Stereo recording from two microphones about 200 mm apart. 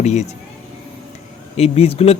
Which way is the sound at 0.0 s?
35° left (ahead or behind).